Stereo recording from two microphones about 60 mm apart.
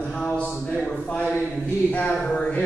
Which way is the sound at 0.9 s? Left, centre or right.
Left.